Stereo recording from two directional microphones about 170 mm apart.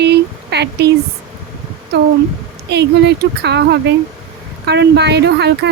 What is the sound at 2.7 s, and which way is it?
Speech, 85° right.